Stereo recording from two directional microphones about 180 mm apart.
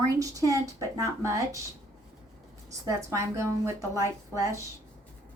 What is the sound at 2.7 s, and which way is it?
A woman's voice, 15° right (ahead or behind).